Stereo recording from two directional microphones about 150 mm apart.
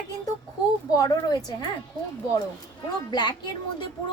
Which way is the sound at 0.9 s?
25° left (ahead or behind).